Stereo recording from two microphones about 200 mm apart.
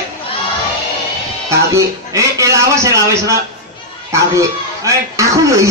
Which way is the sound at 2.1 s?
15° right (ahead or behind).